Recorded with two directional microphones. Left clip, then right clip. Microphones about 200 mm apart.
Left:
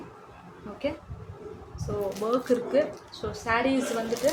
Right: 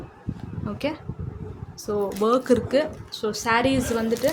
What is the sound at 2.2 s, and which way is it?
Speech, 55° right (ahead or behind).